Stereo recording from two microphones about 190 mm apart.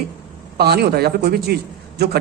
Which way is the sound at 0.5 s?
55° right (ahead or behind).